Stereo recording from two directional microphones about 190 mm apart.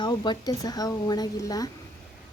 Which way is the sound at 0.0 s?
25° left (ahead or behind).